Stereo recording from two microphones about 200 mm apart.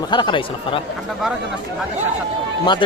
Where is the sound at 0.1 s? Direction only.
25° left (ahead or behind).